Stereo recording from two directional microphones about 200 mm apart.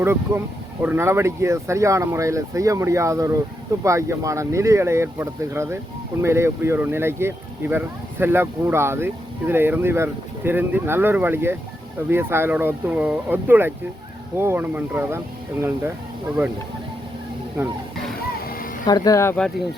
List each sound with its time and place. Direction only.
0.0 s speech: 10° right (ahead or behind)
17.6 s speech: 10° right (ahead or behind)
18.9 s speech: 20° left (ahead or behind)